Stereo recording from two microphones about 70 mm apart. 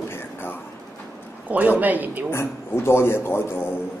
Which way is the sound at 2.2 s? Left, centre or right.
Left.